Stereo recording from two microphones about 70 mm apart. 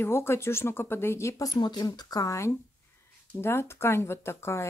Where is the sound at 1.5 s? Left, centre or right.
Left.